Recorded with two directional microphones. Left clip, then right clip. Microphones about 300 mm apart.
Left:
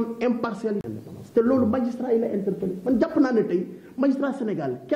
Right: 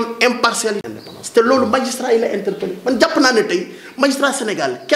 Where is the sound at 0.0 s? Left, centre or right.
Centre.